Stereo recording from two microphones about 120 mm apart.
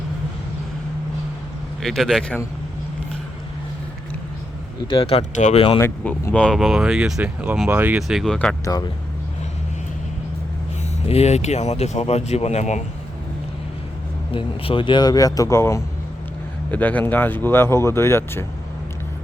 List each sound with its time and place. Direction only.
1.8 s speech: 5° left (ahead or behind)
4.9 s speech: 50° left (ahead or behind)
5.3 s speech: 85° left
5.5 s speech: 45° left (ahead or behind)
5.8 s speech: 20° left (ahead or behind)
6.3 s speech: 5° left (ahead or behind); by 8.0 s 15° right (ahead or behind)
8.0 s speech: centre (ahead or behind)
11.0 s speech: 60° left (ahead or behind)
14.3 s speech: 45° left (ahead or behind); by 18.4 s 20° left (ahead or behind)